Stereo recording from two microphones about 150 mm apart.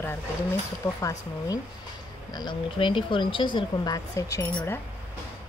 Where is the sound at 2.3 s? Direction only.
30° left (ahead or behind).